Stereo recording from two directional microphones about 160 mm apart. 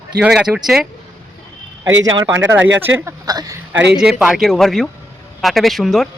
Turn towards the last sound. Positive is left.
turn(degrees=0)  # may be behind; listen again after turning